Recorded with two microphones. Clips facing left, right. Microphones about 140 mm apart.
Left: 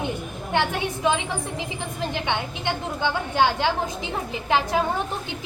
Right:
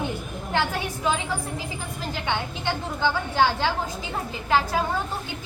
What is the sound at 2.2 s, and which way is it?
A woman's voice, 20° left (ahead or behind).